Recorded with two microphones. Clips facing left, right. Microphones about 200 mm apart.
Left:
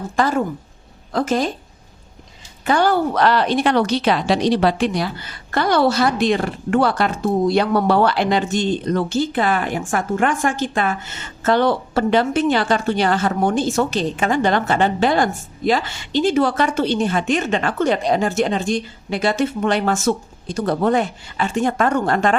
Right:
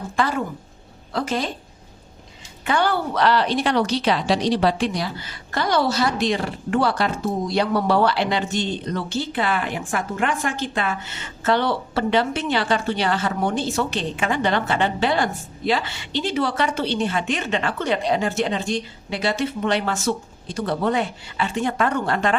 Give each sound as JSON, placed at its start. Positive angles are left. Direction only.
{"t": 0.2, "sound": "a woman's voice", "side_deg": 45}
{"t": 2.6, "sound": "a woman's voice", "side_deg": 40}